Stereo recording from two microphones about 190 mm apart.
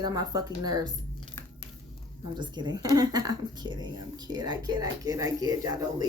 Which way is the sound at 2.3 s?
25° right (ahead or behind).